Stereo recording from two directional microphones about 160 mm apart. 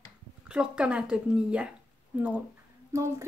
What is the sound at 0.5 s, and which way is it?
Speech, 5° right (ahead or behind).